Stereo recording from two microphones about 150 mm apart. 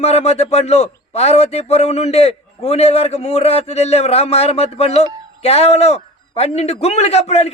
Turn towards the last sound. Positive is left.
turn(degrees=45)  # may be behind; listen again after turning